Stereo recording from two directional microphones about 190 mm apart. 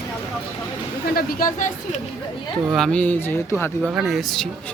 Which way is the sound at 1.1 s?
50° left (ahead or behind).